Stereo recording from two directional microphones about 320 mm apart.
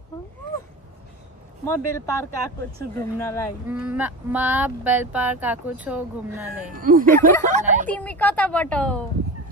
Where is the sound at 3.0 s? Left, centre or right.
Centre.